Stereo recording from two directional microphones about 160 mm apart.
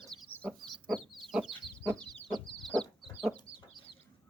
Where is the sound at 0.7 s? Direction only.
Centre (ahead or behind).